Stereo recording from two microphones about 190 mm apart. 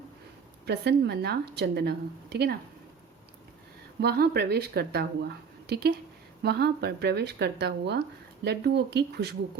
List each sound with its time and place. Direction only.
0.6 s a woman's voice: 60° right (ahead or behind)
4.0 s a woman's voice: 55° right (ahead or behind)